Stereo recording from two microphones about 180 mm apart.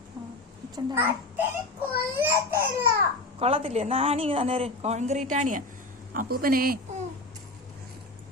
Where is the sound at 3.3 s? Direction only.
30° right (ahead or behind).